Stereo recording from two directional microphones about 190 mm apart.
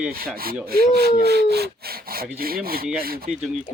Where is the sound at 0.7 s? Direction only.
55° right (ahead or behind).